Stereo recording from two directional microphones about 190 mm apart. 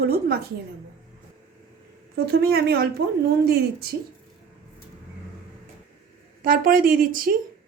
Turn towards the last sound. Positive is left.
turn(degrees=-50)  # may be behind; listen again after turning